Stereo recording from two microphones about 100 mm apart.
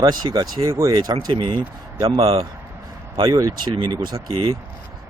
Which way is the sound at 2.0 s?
70° right (ahead or behind).